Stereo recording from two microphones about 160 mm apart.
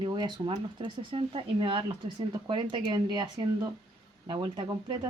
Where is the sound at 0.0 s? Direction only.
25° right (ahead or behind).